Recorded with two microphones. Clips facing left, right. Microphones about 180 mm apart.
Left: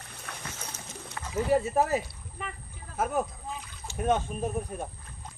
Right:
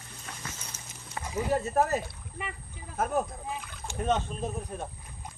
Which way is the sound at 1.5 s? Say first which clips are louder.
Left 2 dB; 10° left (ahead or behind).